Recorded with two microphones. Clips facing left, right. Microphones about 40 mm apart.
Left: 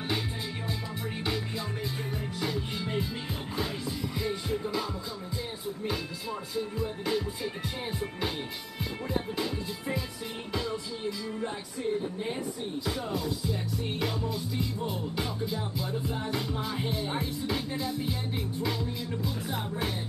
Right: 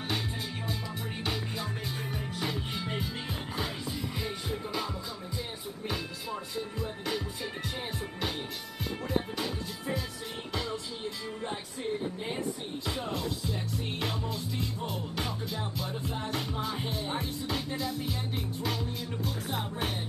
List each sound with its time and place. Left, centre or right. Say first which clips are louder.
2.4 s music: left 2 dB; centre
6.5 s music: left 3 dB; centre
12.8 s music: left 1 dB; right
16.5 s music: left 1 dB; centre
17.5 s music: even; centre
17.9 s music: left 2 dB; left
18.6 s music: left 2 dB; centre